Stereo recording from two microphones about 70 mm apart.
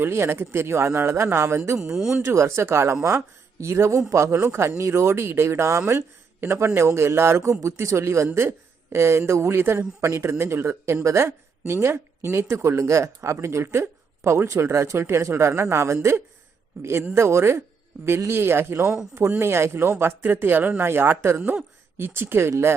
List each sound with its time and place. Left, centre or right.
0.0 s speech: right
1.8 s speech: centre
2.2 s speech: right